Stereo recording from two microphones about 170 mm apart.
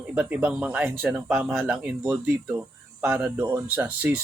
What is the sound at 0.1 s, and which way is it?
Speech, 10° right (ahead or behind).